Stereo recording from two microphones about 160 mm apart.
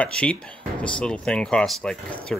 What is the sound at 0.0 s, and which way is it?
Speech, 5° left (ahead or behind).